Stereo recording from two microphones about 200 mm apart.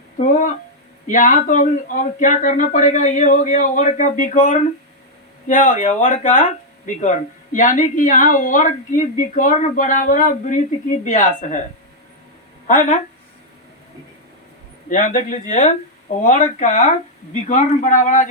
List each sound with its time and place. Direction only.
0.2 s speech: 40° left (ahead or behind)
12.6 s speech: 40° left (ahead or behind)
14.8 s speech: 40° left (ahead or behind)